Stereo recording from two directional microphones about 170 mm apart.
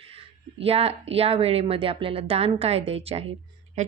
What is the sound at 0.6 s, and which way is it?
A woman's voice, 35° right (ahead or behind).